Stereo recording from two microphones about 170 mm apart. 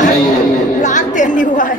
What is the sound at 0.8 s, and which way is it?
Chatter, 45° left (ahead or behind).